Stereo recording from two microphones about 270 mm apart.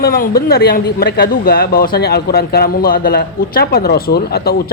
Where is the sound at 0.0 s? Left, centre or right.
Left.